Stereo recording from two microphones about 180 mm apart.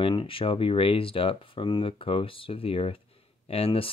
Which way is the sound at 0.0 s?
30° left (ahead or behind).